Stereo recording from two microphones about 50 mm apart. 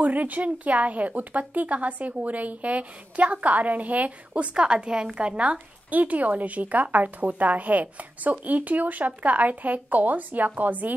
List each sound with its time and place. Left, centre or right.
0.0 s a woman's voice: right
4.3 s a woman's voice: centre